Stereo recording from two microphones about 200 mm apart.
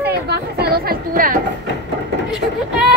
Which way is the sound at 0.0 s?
55° right (ahead or behind).